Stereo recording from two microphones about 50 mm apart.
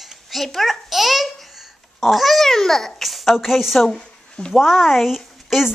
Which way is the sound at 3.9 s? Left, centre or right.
Centre.